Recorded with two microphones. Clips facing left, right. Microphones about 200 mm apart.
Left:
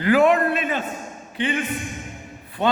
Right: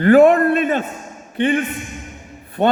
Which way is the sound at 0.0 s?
50° right (ahead or behind).